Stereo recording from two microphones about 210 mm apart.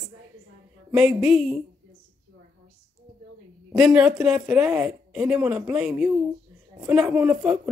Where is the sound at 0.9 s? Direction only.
Centre (ahead or behind).